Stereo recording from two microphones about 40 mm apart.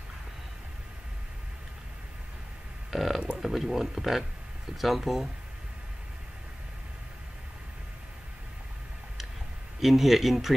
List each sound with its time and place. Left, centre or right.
2.9 s a sound: centre
3.3 s speech: centre
9.8 s speech: centre